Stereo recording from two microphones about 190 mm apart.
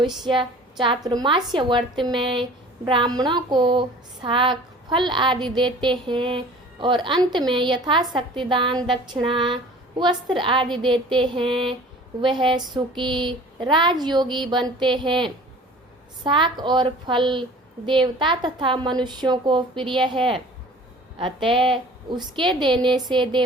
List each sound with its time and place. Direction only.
0.3 s a woman's voice: 25° right (ahead or behind)